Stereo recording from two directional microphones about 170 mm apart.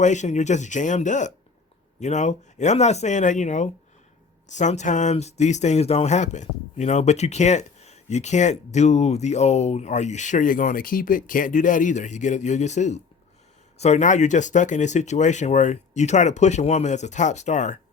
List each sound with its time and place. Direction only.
0.0 s speech: 45° left (ahead or behind)